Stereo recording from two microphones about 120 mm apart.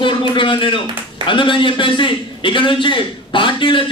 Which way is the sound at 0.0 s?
45° left (ahead or behind).